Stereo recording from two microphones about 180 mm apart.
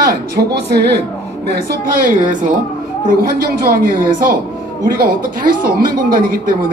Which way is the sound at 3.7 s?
50° right (ahead or behind).